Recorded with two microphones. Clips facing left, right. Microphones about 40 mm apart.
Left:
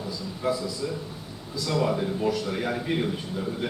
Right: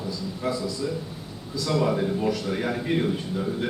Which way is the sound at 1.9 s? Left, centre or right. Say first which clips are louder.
Right 1 dB; centre.